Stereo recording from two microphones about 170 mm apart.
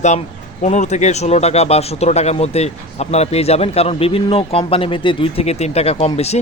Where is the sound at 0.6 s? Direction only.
45° left (ahead or behind).